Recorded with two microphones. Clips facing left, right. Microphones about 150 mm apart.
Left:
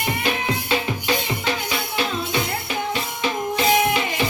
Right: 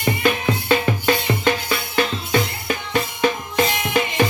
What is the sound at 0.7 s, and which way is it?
Music, 50° right (ahead or behind).